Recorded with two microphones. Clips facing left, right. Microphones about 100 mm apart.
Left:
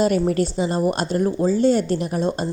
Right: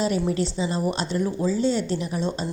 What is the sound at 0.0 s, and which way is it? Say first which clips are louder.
A woman's voice: left 5 dB; 50° left (ahead or behind).